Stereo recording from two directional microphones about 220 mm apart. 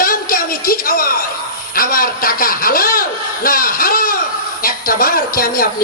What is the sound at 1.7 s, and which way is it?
Speech, 40° left (ahead or behind).